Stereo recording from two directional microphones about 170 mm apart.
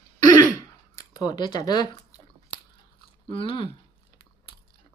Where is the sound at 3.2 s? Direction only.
30° left (ahead or behind).